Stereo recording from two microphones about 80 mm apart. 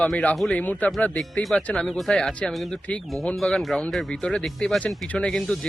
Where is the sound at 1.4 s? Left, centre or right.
Centre.